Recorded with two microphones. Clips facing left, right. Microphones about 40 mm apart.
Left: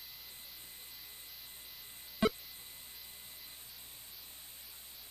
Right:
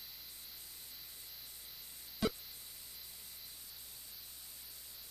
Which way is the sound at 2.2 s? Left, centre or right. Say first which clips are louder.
Left 5 dB; left.